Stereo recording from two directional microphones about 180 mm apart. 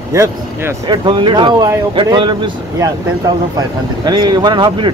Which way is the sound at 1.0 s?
25° right (ahead or behind).